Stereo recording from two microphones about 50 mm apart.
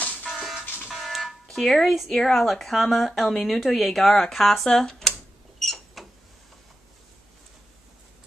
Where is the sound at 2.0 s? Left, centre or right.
Centre.